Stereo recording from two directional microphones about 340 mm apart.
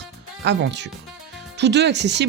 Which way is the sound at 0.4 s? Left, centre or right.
Right.